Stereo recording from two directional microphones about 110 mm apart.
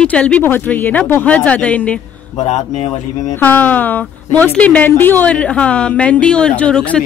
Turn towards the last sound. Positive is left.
turn(degrees=10)  # may be behind; listen again after turning